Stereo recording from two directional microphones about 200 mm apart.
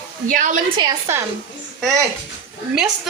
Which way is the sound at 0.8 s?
15° right (ahead or behind).